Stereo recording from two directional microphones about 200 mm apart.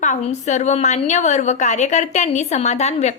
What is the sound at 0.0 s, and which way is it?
A woman's voice, 35° left (ahead or behind).